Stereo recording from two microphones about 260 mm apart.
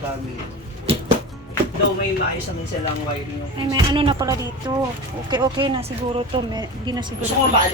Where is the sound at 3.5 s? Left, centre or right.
Centre.